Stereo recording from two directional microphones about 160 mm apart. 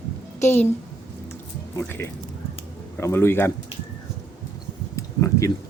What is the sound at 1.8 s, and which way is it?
Speech, 15° left (ahead or behind).